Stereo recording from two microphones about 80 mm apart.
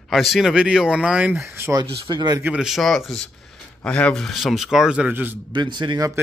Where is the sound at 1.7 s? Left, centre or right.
Right.